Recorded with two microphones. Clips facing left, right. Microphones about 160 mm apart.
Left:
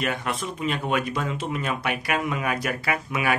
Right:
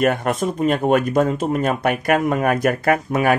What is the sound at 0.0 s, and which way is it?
Speech, 50° right (ahead or behind).